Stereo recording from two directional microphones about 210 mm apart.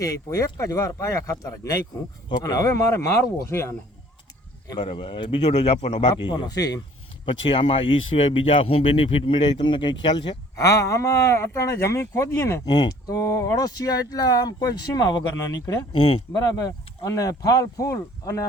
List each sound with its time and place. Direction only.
0.0 s speech: 15° left (ahead or behind)
4.7 s speech: 25° left (ahead or behind)
16.6 s speech: 15° left (ahead or behind)